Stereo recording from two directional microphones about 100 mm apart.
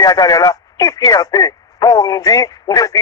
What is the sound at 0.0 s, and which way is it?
Speech, 40° left (ahead or behind).